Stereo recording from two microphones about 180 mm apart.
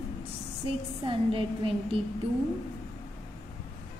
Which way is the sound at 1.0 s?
30° right (ahead or behind).